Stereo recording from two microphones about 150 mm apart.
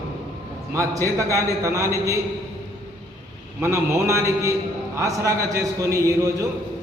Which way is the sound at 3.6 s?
20° right (ahead or behind).